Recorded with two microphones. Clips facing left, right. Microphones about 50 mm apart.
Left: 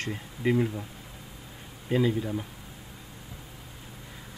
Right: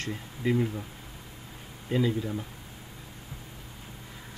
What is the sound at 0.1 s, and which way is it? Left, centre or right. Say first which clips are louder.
Speech: left 2 dB; centre.